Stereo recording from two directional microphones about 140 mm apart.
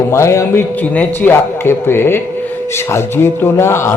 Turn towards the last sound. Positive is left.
turn(degrees=20)  # may be behind; listen again after turning